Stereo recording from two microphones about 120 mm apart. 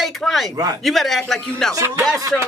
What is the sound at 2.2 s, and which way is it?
Speech, 30° right (ahead or behind).